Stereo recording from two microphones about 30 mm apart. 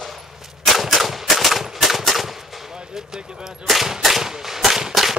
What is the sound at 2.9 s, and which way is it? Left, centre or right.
Speech, centre.